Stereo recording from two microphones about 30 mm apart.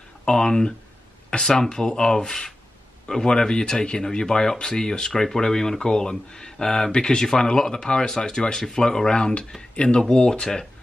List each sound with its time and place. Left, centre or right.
0.2 s speech: left
6.9 s speech: left
9.1 s speech: left